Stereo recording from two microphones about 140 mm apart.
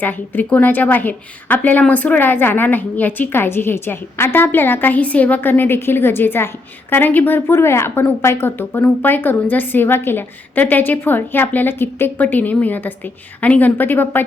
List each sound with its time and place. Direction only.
0.0 s a woman's voice: 10° left (ahead or behind)